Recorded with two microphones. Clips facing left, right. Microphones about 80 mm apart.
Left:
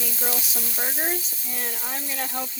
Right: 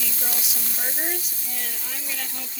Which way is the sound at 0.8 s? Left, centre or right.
Left.